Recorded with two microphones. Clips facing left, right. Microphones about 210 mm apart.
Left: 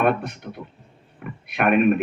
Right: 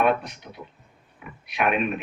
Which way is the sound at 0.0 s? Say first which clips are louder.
Left 1 dB; 55° left (ahead or behind).